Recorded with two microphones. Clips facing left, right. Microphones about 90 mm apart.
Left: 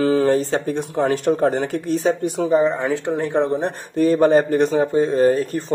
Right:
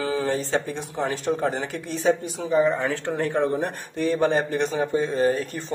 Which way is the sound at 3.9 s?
40° left (ahead or behind).